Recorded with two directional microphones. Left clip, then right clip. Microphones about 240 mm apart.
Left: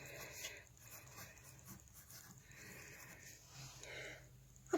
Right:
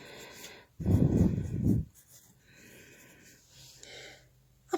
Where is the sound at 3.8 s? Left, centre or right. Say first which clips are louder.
Right 3 dB; right.